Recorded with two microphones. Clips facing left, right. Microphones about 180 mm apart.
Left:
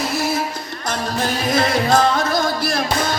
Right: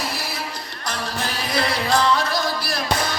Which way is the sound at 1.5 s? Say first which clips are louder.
Left 4 dB; 45° left (ahead or behind).